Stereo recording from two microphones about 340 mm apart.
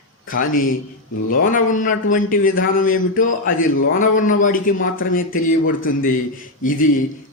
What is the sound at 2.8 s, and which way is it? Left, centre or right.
A man's voice, left.